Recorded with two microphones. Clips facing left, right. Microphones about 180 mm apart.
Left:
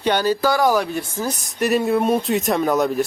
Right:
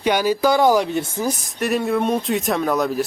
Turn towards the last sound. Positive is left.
turn(degrees=0)  # may be behind; listen again after turning